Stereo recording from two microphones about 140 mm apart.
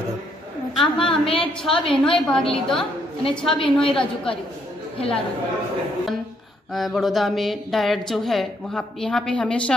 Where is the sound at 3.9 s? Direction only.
40° left (ahead or behind).